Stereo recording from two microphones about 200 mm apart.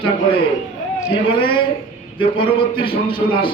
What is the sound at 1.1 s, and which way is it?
A man's voice, 25° left (ahead or behind).